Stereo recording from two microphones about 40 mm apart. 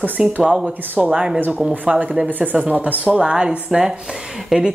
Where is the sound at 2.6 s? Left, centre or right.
Right.